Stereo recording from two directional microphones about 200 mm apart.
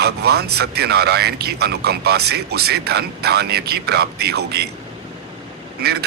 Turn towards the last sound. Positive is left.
turn(degrees=-55)  # may be behind; listen again after turning